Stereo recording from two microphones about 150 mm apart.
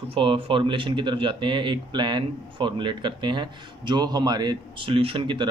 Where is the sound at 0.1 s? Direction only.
35° right (ahead or behind).